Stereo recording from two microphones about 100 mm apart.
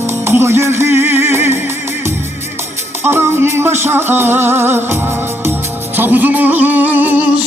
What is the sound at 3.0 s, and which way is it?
Music, 25° right (ahead or behind).